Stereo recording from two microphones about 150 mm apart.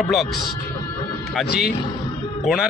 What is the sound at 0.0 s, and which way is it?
Speech, centre (ahead or behind).